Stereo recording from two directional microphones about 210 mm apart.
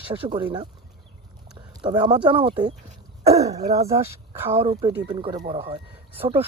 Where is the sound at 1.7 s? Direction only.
20° right (ahead or behind).